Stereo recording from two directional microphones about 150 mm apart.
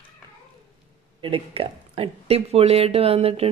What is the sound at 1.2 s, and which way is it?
Speech, 40° right (ahead or behind).